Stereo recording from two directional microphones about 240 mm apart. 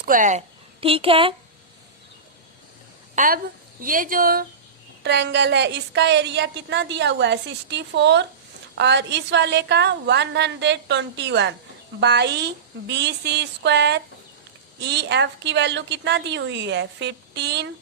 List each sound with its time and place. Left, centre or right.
0.0 s a woman's voice: right
3.2 s a woman's voice: right